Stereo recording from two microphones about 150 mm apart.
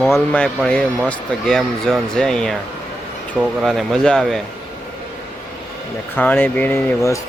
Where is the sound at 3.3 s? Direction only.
10° right (ahead or behind).